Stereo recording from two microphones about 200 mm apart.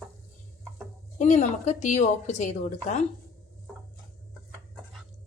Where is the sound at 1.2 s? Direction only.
35° left (ahead or behind).